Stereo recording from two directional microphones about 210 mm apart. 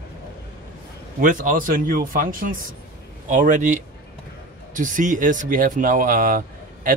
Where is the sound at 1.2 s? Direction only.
40° right (ahead or behind).